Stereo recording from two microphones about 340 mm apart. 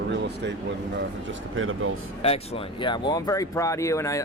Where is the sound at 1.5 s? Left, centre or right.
Right.